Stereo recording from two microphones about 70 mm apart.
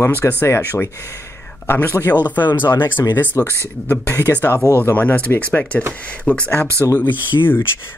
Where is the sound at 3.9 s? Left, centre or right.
Left.